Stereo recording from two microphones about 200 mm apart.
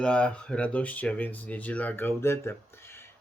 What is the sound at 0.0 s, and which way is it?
Speech, 5° left (ahead or behind).